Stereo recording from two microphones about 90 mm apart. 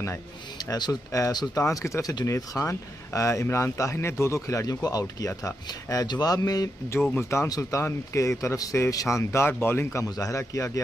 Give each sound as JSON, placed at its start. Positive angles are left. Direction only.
{"t": 0.7, "sound": "speech", "side_deg": 50}
{"t": 1.1, "sound": "speech", "side_deg": 40}
{"t": 2.3, "sound": "speech", "side_deg": 30}
{"t": 7.2, "sound": "speech", "side_deg": 30}
{"t": 7.4, "sound": "speech", "side_deg": 45}
{"t": 7.8, "sound": "speech", "side_deg": 30}
{"t": 10.1, "sound": "speech", "side_deg": 35}